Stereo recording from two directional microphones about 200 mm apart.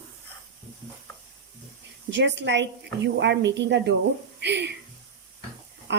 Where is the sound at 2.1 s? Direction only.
60° right (ahead or behind).